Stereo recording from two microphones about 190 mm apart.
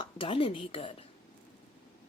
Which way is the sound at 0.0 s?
25° left (ahead or behind).